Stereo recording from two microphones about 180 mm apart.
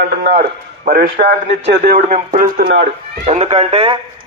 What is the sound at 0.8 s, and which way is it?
A man's voice, 55° right (ahead or behind).